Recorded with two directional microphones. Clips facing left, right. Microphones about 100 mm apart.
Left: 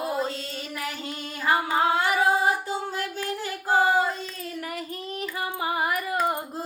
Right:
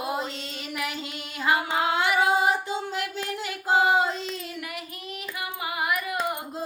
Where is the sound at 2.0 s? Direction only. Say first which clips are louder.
Even; 35° left (ahead or behind).